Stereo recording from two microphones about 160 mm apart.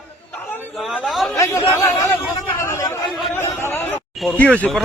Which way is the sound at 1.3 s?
20° left (ahead or behind).